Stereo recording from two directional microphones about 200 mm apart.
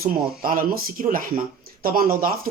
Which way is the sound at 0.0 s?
45° right (ahead or behind).